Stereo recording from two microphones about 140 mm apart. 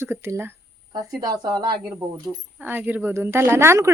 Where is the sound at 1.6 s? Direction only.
30° right (ahead or behind).